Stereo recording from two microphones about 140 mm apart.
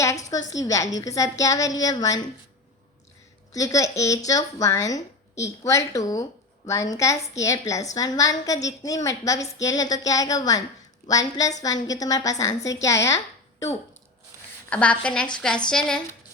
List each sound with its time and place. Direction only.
0.0 s a woman's voice: 20° left (ahead or behind)
3.5 s a woman's voice: 25° left (ahead or behind)
14.7 s a woman's voice: 10° left (ahead or behind)